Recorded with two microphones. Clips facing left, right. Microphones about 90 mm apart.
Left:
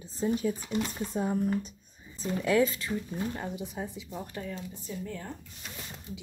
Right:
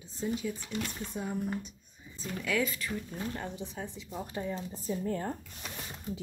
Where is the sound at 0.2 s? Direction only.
40° left (ahead or behind).